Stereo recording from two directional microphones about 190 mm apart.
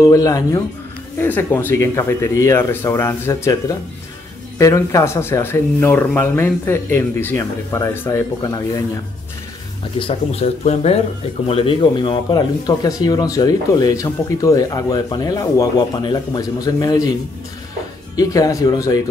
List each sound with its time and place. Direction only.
0.0 s speech: 15° left (ahead or behind)
9.9 s speech: 30° left (ahead or behind)
18.1 s speech: 20° left (ahead or behind)